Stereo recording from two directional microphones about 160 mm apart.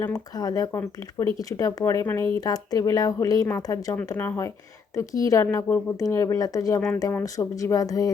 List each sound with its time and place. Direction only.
0.0 s speech: 25° left (ahead or behind)